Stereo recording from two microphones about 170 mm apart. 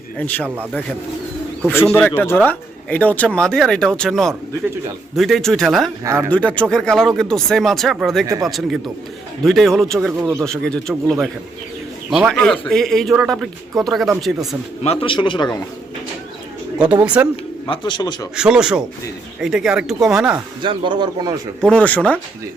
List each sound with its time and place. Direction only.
0.2 s speech: 10° left (ahead or behind)
0.4 s speech: 10° right (ahead or behind)
1.9 s speech: 10° left (ahead or behind)
6.1 s speech: 15° right (ahead or behind)
6.3 s speech: 10° left (ahead or behind)
10.2 s speech: 15° right (ahead or behind)
10.4 s speech: 5° left (ahead or behind)
14.8 s speech: 30° left (ahead or behind)
16.9 s speech: 10° right (ahead or behind)
17.7 s speech: 25° left (ahead or behind)
18.3 s speech: 5° right (ahead or behind)
20.6 s speech: 30° right (ahead or behind)
21.6 s speech: 5° left (ahead or behind)